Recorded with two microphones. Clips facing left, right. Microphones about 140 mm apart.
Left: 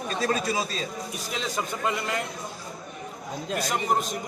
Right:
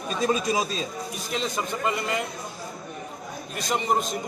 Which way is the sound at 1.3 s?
5° left (ahead or behind).